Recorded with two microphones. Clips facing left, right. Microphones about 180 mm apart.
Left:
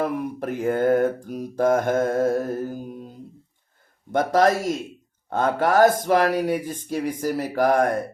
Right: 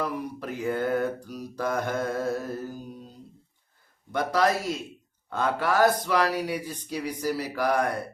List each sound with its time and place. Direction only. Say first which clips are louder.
0.0 s mantra: left 6 dB; 55° left (ahead or behind)